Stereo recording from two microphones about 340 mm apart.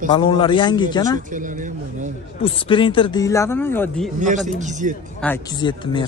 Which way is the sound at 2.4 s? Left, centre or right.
Centre.